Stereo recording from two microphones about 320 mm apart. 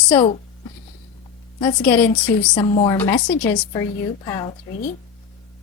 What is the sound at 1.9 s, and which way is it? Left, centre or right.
Speech, centre.